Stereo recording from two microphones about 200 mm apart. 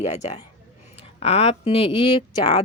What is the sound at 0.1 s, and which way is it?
A woman's voice, 30° left (ahead or behind).